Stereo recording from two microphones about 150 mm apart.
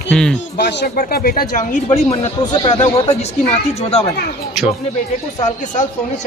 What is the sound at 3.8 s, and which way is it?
Speech, 45° left (ahead or behind).